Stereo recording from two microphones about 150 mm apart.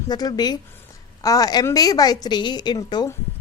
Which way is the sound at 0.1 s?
25° left (ahead or behind).